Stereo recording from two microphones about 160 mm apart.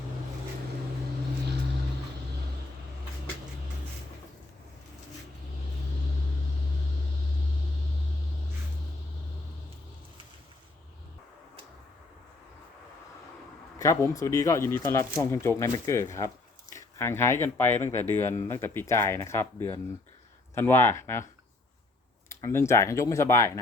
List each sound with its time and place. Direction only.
13.7 s speech: 20° left (ahead or behind)
22.3 s speech: 20° left (ahead or behind)